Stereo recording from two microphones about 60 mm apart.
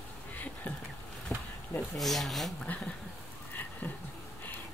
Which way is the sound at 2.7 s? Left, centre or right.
Left.